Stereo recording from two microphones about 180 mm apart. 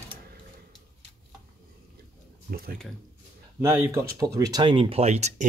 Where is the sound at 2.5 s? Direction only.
55° right (ahead or behind).